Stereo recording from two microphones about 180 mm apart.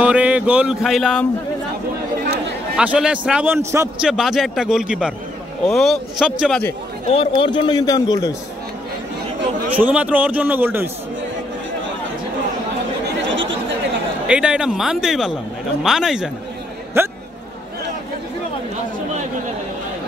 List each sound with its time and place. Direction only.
0.0 s speech: 5° right (ahead or behind)
2.8 s a man's voice: 5° right (ahead or behind)
4.0 s a man's voice: centre (ahead or behind)
7.1 s a man's voice: 30° left (ahead or behind)
9.8 s a man's voice: 10° right (ahead or behind)
14.2 s a man's voice: 5° right (ahead or behind)
17.0 s a man's voice: 15° right (ahead or behind)